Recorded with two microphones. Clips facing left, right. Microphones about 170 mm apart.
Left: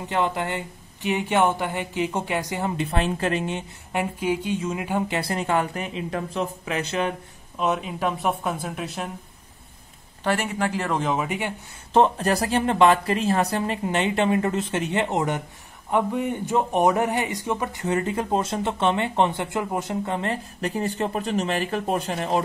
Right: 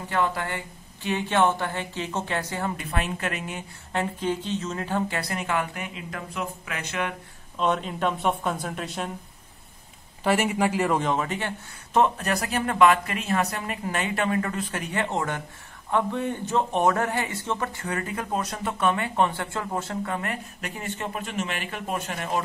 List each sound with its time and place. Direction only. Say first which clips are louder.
0.0 s speech: left 2 dB; 20° left (ahead or behind)
2.8 s speech: left 5 dB; 30° left (ahead or behind)
3.9 s speech: left 2 dB; 10° left (ahead or behind)
5.2 s speech: left 4 dB; 30° left (ahead or behind)
7.5 s a woman's voice: even; 5° left (ahead or behind)
10.2 s a woman's voice: right 2 dB; 5° right (ahead or behind)
11.2 s speech: left 2 dB; 10° left (ahead or behind)
11.9 s speech: left 3 dB; 30° left (ahead or behind)